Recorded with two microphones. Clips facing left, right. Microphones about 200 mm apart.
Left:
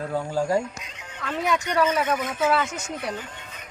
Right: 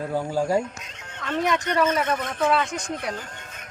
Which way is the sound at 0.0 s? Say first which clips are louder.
Right 1 dB; 10° right (ahead or behind).